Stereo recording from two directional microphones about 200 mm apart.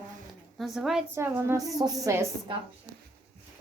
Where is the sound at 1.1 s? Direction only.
10° right (ahead or behind).